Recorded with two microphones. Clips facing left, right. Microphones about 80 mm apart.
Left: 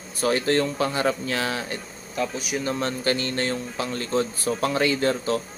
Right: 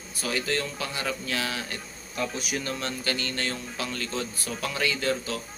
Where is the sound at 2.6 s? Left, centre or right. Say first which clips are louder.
Left 6 dB; left.